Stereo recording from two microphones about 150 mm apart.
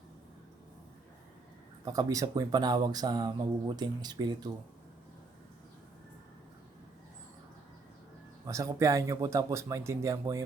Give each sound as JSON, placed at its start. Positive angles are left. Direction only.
{"t": 1.8, "sound": "speech", "side_deg": -25}
{"t": 8.4, "sound": "speech", "side_deg": -20}